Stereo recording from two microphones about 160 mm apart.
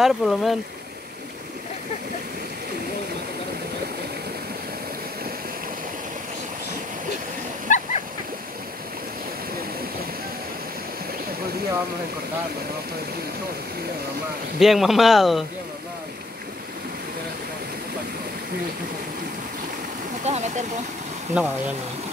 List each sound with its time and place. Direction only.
0.0 s speech: centre (ahead or behind)
7.7 s splash: 50° left (ahead or behind)
14.6 s speech: centre (ahead or behind)
20.2 s speech: 45° right (ahead or behind)
21.3 s speech: 5° right (ahead or behind)